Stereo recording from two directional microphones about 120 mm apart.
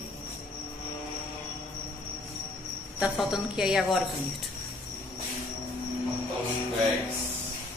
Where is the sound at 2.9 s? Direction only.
5° right (ahead or behind).